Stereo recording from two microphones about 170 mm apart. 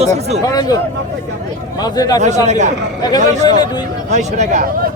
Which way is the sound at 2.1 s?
45° right (ahead or behind).